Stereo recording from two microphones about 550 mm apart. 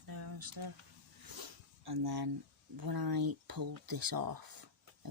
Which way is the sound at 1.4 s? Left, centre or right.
Right.